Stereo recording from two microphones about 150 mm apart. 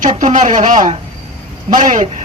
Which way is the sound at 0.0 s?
55° right (ahead or behind).